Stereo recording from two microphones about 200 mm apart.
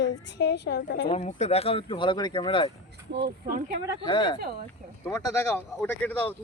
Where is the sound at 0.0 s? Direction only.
60° left (ahead or behind).